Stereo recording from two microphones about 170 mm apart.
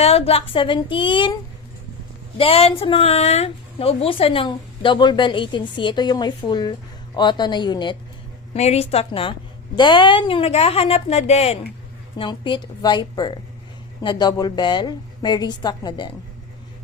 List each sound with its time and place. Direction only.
0.0 s a woman's voice: 35° left (ahead or behind)
2.4 s speech: 35° left (ahead or behind)
8.5 s a woman's voice: 40° left (ahead or behind)
12.1 s speech: 30° left (ahead or behind)